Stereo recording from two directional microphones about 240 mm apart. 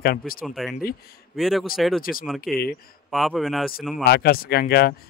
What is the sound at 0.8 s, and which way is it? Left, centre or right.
Speech, left.